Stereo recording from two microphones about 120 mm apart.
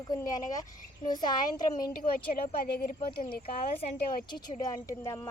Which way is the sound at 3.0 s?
45° left (ahead or behind).